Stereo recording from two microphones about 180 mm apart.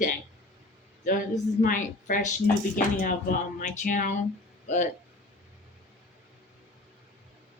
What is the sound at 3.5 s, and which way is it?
A woman's voice, 45° left (ahead or behind).